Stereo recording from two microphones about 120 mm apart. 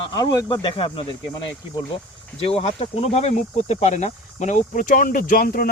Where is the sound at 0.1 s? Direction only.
35° left (ahead or behind).